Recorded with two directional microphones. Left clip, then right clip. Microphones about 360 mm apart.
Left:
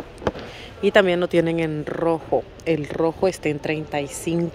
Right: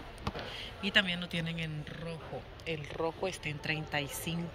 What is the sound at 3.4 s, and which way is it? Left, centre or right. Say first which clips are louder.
Speech: left 12 dB; centre.